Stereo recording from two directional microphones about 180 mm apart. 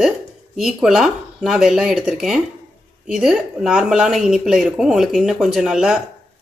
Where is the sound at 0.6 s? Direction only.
5° right (ahead or behind).